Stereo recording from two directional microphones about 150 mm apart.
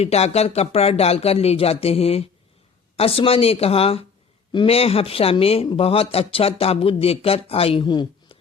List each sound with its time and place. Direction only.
0.0 s speech: 45° left (ahead or behind)